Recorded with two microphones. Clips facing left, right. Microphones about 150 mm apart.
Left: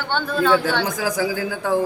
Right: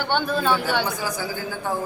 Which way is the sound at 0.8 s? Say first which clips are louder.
Left 5 dB; 90° left.